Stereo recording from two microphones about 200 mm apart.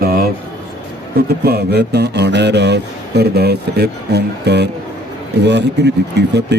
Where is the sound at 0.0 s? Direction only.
50° right (ahead or behind).